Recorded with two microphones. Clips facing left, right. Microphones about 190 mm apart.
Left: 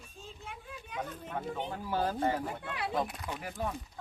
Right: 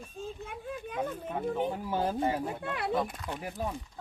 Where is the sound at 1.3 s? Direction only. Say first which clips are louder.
Right 5 dB; 10° right (ahead or behind).